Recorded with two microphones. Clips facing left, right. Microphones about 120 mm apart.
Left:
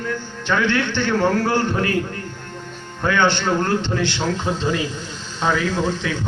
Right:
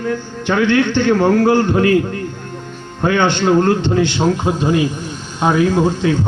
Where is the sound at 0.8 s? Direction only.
15° right (ahead or behind).